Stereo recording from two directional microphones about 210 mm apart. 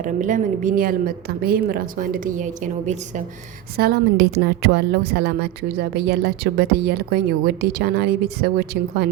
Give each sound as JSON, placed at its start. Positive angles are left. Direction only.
{"t": 0.0, "sound": "a woman's voice", "side_deg": -35}
{"t": 3.8, "sound": "a woman's voice", "side_deg": -50}